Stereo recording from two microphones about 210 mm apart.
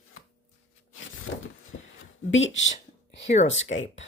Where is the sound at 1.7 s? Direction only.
60° left (ahead or behind).